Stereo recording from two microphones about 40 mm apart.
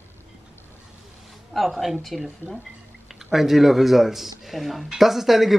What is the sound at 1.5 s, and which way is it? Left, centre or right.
A woman's voice, centre.